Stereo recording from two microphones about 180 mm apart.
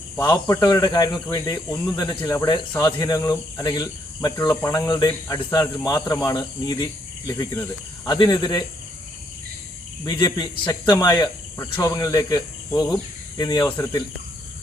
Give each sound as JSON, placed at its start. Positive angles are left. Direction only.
{"t": 0.2, "sound": "speech", "side_deg": 15}
{"t": 10.0, "sound": "speech", "side_deg": 20}
{"t": 10.9, "sound": "speech", "side_deg": 15}
{"t": 13.7, "sound": "speech", "side_deg": 10}